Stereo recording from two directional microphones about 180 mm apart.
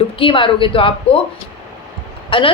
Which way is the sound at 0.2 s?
30° left (ahead or behind).